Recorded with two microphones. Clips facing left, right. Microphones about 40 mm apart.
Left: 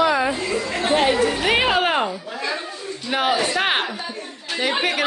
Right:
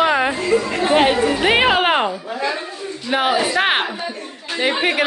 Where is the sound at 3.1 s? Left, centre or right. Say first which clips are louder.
Right 3 dB; centre.